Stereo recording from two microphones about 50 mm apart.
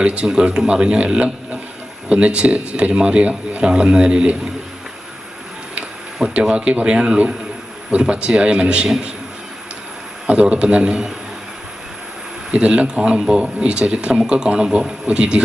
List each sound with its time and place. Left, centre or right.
0.0 s a man's voice: right
6.2 s a man's voice: centre
10.2 s a man's voice: right
12.5 s a man's voice: right